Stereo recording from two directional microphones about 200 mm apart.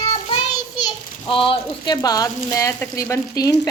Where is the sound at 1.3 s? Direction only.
25° left (ahead or behind).